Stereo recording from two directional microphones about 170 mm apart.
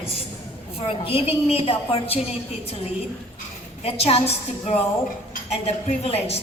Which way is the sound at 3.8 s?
35° left (ahead or behind).